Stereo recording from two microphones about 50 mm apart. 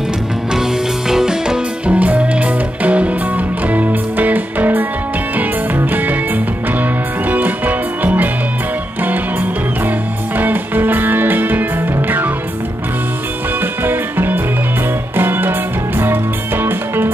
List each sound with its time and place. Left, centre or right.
0.6 s music: centre
1.9 s music: right
5.9 s music: right
13.8 s music: right